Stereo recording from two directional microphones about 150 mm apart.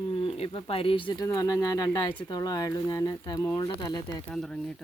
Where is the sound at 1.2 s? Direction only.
20° left (ahead or behind).